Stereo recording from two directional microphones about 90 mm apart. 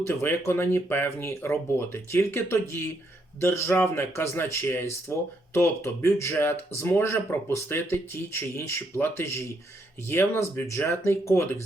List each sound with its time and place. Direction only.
0.0 s speech: 25° left (ahead or behind)